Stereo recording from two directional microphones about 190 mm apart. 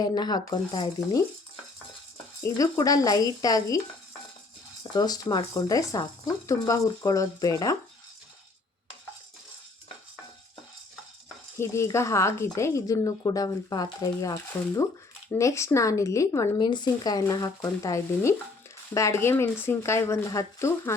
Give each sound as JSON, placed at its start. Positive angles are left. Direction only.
{"t": 0.0, "sound": "speech", "side_deg": 20}
{"t": 2.4, "sound": "speech", "side_deg": 15}
{"t": 4.8, "sound": "speech", "side_deg": 20}
{"t": 11.5, "sound": "speech", "side_deg": 15}